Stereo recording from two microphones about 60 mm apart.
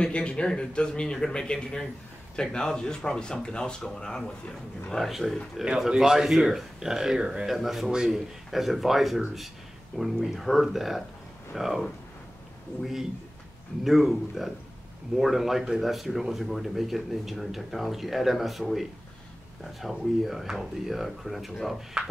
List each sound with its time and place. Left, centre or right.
0.0 s speech: centre
5.9 s speech: centre
22.0 s speech: centre